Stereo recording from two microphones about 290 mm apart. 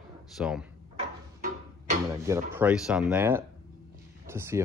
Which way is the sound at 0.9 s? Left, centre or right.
Right.